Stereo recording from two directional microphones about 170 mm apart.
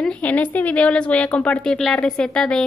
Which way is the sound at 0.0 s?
10° left (ahead or behind).